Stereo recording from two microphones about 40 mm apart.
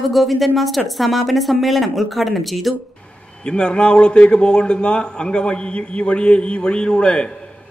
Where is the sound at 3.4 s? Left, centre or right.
Left.